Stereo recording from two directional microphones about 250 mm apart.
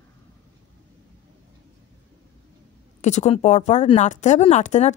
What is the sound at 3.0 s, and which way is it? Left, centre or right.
Speech, left.